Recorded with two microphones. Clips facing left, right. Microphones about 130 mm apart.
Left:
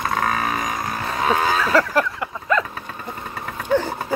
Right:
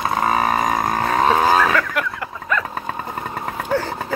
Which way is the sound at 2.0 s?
35° left (ahead or behind).